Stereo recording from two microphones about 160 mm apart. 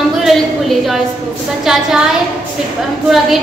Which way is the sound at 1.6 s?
5° right (ahead or behind).